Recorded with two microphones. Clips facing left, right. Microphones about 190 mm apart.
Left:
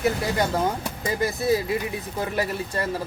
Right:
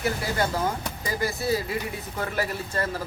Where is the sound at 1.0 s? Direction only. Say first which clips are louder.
Left 4 dB; 20° left (ahead or behind).